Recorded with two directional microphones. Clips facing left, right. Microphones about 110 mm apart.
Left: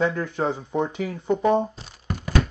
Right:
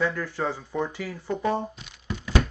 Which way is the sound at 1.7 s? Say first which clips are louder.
Left 2 dB; 35° left (ahead or behind).